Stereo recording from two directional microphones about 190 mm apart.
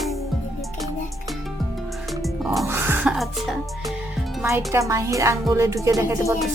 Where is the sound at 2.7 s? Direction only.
10° right (ahead or behind).